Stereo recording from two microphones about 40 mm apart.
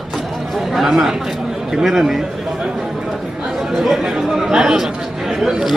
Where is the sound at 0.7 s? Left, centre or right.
Centre.